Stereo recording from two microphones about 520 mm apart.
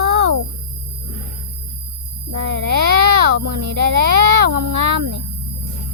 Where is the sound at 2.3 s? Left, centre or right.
Right.